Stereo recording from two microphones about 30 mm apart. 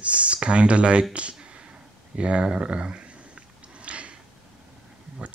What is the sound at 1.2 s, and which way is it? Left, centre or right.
Speech, right.